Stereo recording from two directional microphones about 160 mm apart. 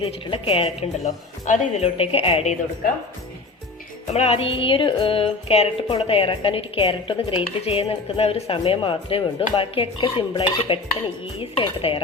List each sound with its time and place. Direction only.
0.0 s speech: 35° left (ahead or behind)
4.0 s speech: 40° left (ahead or behind)